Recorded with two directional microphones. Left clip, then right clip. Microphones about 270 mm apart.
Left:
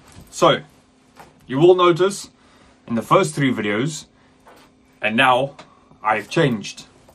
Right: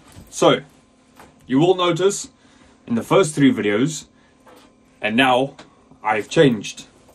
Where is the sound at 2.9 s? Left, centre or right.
Left.